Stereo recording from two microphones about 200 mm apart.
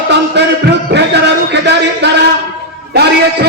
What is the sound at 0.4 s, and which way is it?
Speech, 60° right (ahead or behind).